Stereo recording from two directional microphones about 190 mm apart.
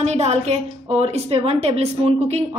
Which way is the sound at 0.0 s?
35° right (ahead or behind).